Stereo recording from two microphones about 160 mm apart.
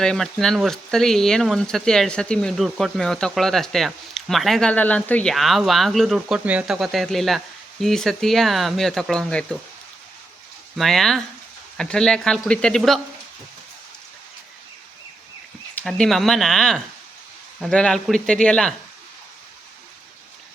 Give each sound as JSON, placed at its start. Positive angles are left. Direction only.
{"t": 0.0, "sound": "speech", "side_deg": 5}
{"t": 10.8, "sound": "speech", "side_deg": 0}
{"t": 15.7, "sound": "speech", "side_deg": 5}